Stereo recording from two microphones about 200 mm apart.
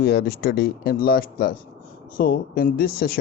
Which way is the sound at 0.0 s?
55° left (ahead or behind).